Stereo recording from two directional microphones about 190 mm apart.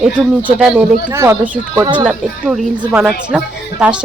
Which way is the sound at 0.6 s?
5° right (ahead or behind).